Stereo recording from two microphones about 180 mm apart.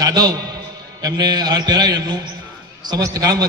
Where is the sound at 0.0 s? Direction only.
20° right (ahead or behind).